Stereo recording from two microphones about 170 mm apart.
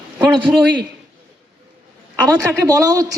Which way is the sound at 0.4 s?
Centre (ahead or behind).